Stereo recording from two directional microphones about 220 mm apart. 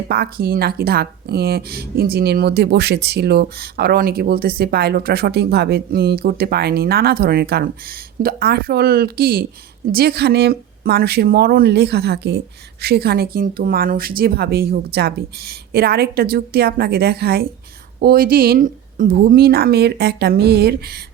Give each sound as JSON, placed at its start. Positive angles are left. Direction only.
{"t": 0.1, "sound": "speech", "side_deg": -45}